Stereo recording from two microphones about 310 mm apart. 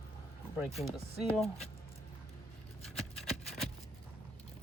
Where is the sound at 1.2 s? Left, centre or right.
Centre.